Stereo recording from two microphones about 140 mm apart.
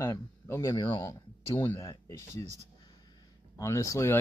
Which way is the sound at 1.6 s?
20° left (ahead or behind).